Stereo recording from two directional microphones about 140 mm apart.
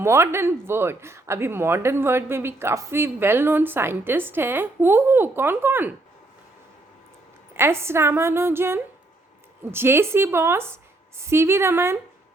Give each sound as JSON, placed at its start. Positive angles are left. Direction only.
{"t": 0.0, "sound": "speech", "side_deg": -20}
{"t": 7.5, "sound": "speech", "side_deg": -20}